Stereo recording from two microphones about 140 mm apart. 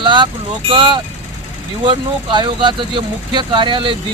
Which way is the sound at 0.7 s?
35° right (ahead or behind).